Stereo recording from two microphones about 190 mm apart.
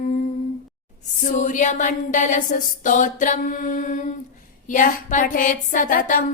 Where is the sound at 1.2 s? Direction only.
40° left (ahead or behind).